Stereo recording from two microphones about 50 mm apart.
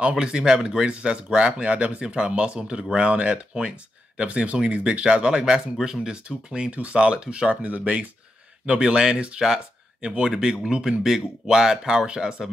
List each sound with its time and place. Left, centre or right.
0.1 s speech: centre
7.6 s speech: right
8.6 s speech: centre